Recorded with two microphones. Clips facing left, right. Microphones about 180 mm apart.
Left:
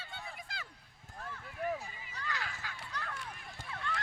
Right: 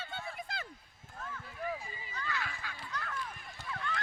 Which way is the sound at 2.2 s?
40° left (ahead or behind).